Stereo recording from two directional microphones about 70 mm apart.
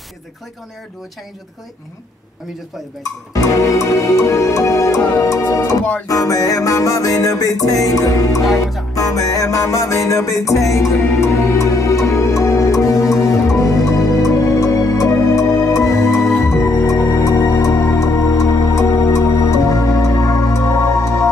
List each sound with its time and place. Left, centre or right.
3.3 s music: left